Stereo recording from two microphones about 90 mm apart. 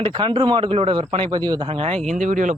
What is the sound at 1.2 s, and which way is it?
Speech, 55° right (ahead or behind).